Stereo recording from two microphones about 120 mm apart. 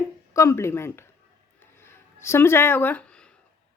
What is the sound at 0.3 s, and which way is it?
Speech, 25° left (ahead or behind).